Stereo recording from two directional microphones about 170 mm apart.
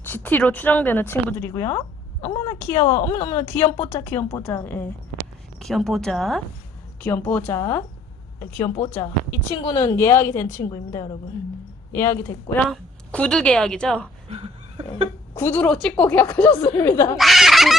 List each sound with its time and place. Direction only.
0.0 s speech: 10° left (ahead or behind)
2.8 s a woman's voice: 45° left (ahead or behind)
3.1 s speech: 15° left (ahead or behind)
15.4 s speech: 10° left (ahead or behind)
17.2 s fowl: centre (ahead or behind)